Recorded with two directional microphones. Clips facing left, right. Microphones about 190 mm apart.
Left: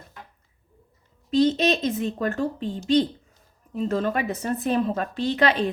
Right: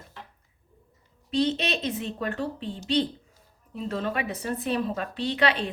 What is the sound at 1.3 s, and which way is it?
Speech, 40° left (ahead or behind).